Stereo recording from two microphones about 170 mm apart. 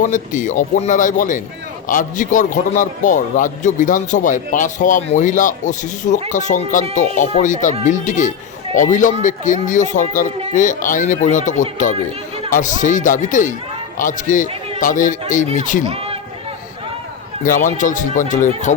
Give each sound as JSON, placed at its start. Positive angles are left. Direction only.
{"t": 0.0, "sound": "a man's voice", "side_deg": 50}
{"t": 15.9, "sound": "a sound", "side_deg": -35}
{"t": 17.4, "sound": "a man's voice", "side_deg": 50}